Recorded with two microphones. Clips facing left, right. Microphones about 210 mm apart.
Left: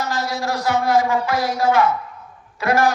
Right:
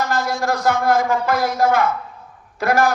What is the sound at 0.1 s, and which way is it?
Speech, 50° right (ahead or behind).